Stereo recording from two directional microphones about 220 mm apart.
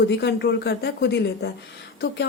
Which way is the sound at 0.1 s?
50° left (ahead or behind).